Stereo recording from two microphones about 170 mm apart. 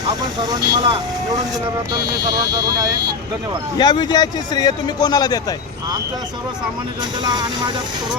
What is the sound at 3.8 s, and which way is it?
A man's voice, 25° left (ahead or behind).